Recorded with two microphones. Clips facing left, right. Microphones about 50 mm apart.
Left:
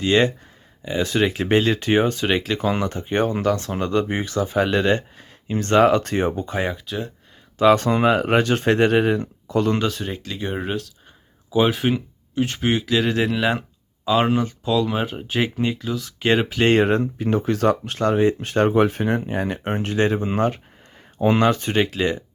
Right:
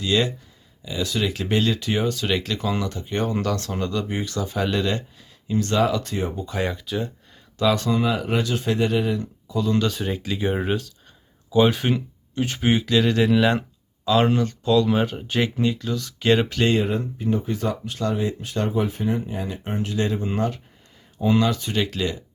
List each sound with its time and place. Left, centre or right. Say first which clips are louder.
0.0 s speech: left 4 dB; left
3.4 s speech: left 4 dB; left
6.7 s speech: right 1 dB; centre
7.6 s speech: left 5 dB; left
9.9 s speech: right 2 dB; centre
16.6 s speech: left 7 dB; left
17.2 s speech: left 4 dB; left
17.9 s speech: left 6 dB; left